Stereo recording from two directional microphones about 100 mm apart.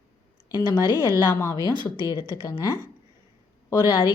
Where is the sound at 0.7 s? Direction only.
35° left (ahead or behind).